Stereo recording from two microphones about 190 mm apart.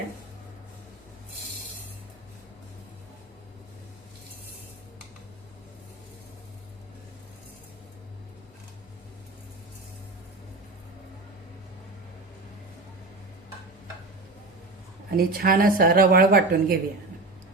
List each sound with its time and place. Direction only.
15.1 s speech: 50° right (ahead or behind)